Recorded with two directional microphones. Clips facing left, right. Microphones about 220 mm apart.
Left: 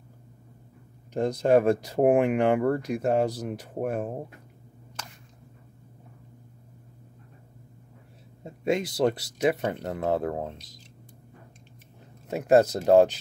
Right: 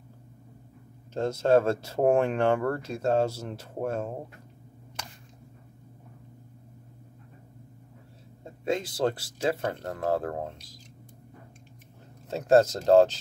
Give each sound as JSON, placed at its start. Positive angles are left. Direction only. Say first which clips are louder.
{"t": 1.1, "sound": "speech", "louder": "left 1 dB", "side_deg": 15}
{"t": 8.5, "sound": "speech", "louder": "left 3 dB", "side_deg": 20}
{"t": 12.3, "sound": "speech", "louder": "left 1 dB", "side_deg": 15}